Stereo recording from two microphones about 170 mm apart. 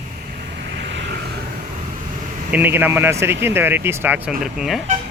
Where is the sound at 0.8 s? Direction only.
85° right.